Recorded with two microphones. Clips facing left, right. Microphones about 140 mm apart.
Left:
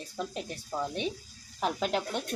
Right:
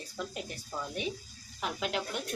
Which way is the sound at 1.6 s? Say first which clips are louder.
Left 4 dB; 35° left (ahead or behind).